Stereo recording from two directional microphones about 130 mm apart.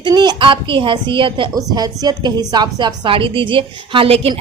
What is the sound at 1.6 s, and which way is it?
A woman's voice, 30° right (ahead or behind).